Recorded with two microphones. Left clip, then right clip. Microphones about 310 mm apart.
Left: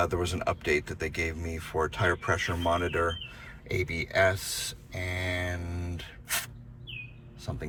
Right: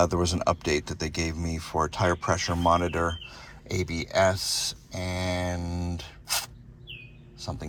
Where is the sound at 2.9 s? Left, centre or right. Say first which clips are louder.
Even; right.